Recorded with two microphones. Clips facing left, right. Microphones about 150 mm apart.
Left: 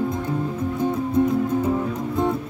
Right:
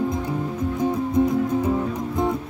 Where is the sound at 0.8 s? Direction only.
15° right (ahead or behind).